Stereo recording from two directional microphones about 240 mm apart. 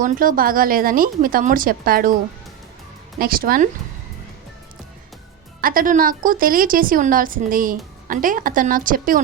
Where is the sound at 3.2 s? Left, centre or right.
Right.